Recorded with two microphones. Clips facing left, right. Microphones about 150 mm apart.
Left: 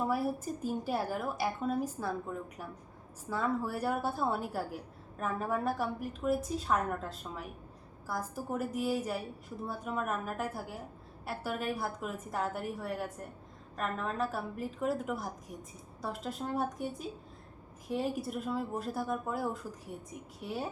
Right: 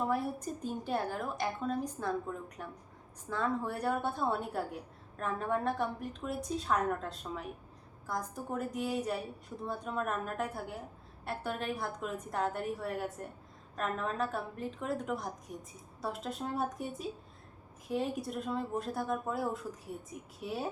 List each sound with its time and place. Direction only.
0.1 s speech: 5° left (ahead or behind)